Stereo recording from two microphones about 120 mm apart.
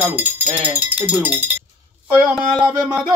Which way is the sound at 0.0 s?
15° right (ahead or behind).